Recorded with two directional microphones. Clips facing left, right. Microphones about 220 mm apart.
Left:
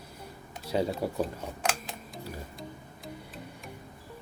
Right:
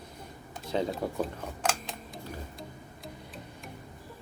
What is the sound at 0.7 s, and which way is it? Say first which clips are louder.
Speech: left 1 dB; 10° left (ahead or behind).